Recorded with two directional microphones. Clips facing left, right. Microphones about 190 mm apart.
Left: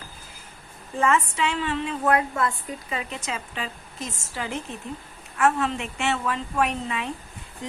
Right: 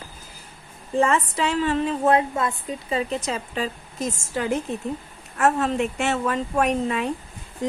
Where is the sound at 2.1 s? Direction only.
25° right (ahead or behind); by 7.1 s 40° right (ahead or behind).